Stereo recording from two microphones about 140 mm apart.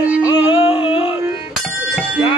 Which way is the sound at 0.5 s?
40° left (ahead or behind).